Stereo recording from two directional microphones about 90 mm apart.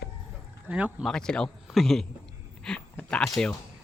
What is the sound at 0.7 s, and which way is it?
Speech, 15° right (ahead or behind).